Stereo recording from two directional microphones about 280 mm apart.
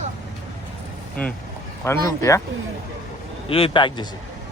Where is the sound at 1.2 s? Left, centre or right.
Centre.